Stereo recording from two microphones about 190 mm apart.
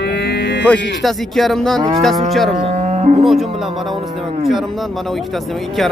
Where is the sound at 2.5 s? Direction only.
40° right (ahead or behind).